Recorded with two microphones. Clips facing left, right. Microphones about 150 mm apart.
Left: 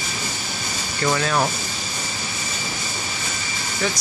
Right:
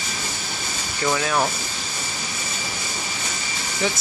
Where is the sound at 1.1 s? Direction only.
5° right (ahead or behind).